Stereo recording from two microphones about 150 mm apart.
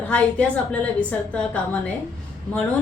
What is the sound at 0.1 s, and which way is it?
A woman's voice, 10° left (ahead or behind).